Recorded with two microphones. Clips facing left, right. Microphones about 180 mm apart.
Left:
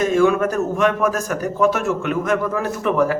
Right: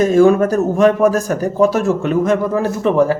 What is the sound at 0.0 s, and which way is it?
A man's voice, 35° right (ahead or behind).